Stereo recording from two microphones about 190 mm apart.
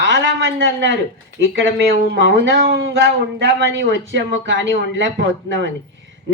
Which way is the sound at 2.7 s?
75° right (ahead or behind).